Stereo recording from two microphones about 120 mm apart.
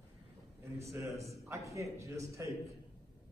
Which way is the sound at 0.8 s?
25° right (ahead or behind).